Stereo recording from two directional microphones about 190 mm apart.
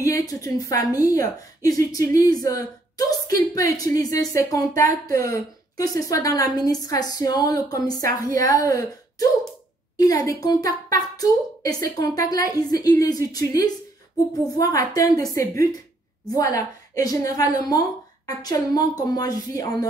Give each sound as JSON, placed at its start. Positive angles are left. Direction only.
{"t": 0.0, "sound": "a woman's voice", "side_deg": 20}
{"t": 9.9, "sound": "a woman's voice", "side_deg": 20}